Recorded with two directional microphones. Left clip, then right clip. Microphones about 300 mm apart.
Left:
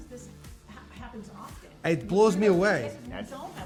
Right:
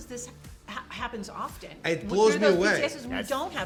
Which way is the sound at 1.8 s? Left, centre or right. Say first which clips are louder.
Left 1 dB; left.